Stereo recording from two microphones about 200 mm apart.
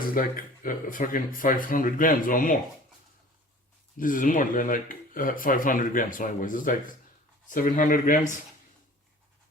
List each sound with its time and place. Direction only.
0.1 s speech: 45° left (ahead or behind)
3.9 s speech: 40° left (ahead or behind)